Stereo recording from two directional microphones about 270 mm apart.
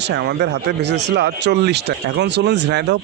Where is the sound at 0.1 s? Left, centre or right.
Right.